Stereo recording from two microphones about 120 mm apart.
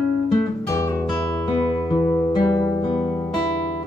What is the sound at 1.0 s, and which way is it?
Music, 45° left (ahead or behind).